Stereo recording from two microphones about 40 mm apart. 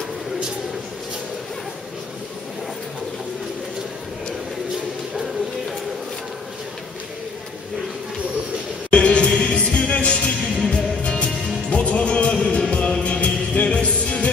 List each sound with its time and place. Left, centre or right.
8.9 s music: left